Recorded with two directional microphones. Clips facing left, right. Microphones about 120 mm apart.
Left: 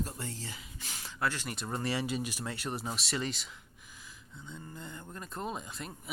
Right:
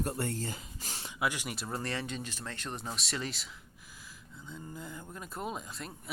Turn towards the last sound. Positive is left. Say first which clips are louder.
# even
turn(degrees=0)  # may be behind; listen again after turning